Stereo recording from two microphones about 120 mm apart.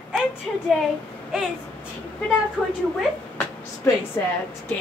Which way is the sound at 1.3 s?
5° right (ahead or behind).